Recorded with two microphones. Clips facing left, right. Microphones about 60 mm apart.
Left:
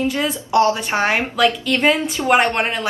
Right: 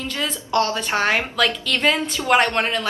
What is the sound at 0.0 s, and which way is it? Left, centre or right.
A woman's voice, centre.